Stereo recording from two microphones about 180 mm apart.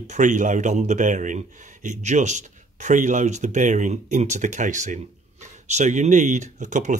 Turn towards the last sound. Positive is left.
turn(degrees=-45)  # may be behind; listen again after turning